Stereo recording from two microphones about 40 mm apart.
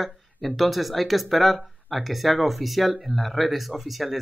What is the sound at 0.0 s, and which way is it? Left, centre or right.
Speech, centre.